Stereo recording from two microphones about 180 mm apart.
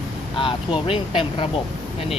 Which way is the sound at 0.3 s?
30° left (ahead or behind).